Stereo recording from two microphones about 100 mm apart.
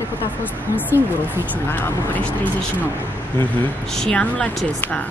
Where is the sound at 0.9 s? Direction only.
25° right (ahead or behind).